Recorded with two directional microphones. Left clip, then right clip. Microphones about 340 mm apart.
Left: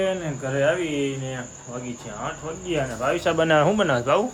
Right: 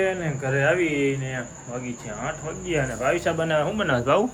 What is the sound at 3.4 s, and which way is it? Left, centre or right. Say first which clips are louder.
Speech: left 8 dB; left.